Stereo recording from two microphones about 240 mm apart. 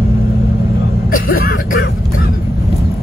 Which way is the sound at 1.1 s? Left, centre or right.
Left.